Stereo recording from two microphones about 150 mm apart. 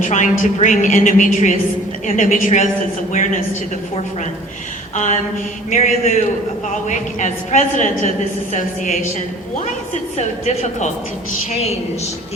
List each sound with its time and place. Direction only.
0.0 s a woman's voice: 55° left (ahead or behind)
5.7 s a woman's voice: 55° left (ahead or behind)